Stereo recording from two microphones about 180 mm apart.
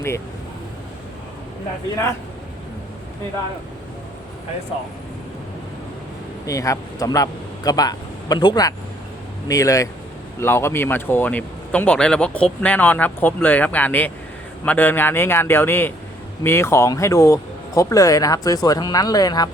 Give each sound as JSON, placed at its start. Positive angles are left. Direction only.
{"t": 6.4, "sound": "a man's voice", "side_deg": 20}